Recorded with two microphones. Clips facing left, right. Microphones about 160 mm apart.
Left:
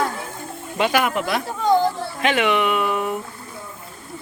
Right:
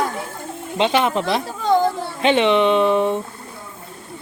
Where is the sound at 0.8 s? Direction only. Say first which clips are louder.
Right 2 dB; 25° right (ahead or behind).